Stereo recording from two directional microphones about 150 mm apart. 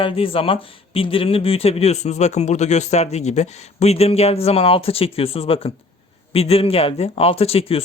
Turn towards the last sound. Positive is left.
turn(degrees=40)  # may be behind; listen again after turning